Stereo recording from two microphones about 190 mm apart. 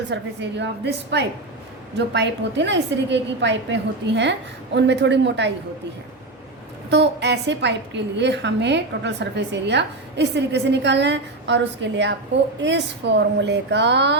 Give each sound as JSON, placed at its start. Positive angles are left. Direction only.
{"t": 0.1, "sound": "a woman's voice", "side_deg": -65}
{"t": 6.9, "sound": "a woman's voice", "side_deg": -65}